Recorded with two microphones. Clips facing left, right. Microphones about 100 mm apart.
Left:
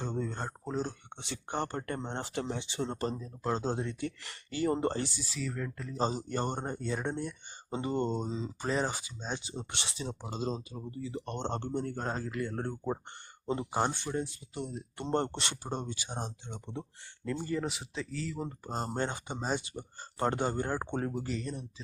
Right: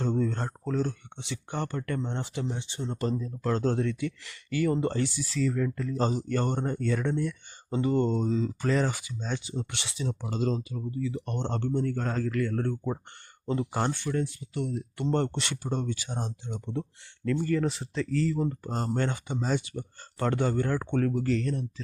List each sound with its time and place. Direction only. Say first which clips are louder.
0.0 s a sound: right 7 dB; 10° left (ahead or behind)
0.6 s a sound: right 6 dB; 20° left (ahead or behind)
1.1 s speech: right 1 dB; 40° left (ahead or behind)
2.2 s speech: right 2 dB; 50° left (ahead or behind)
2.5 s speech: even; 85° left
2.9 s speech: right 9 dB; 30° left (ahead or behind)
3.2 s speech: right 5 dB; 20° left (ahead or behind)
4.0 s speech: right 4 dB; 40° left (ahead or behind); by 5.4 s 25° left (ahead or behind)
5.4 s speech: right 9 dB; 5° left (ahead or behind)
6.0 s speech: right 3 dB; 25° left (ahead or behind)
11.3 s speech: right 4 dB; 25° left (ahead or behind)
16.5 s speech: right 7 dB; centre (ahead or behind)
17.4 s speech: right 6 dB; 15° left (ahead or behind)
18.9 s speech: right 7 dB; 25° left (ahead or behind); by 21.7 s 10° left (ahead or behind)